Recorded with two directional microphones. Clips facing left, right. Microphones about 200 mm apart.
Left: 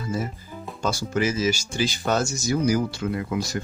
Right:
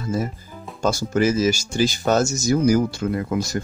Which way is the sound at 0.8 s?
45° right (ahead or behind).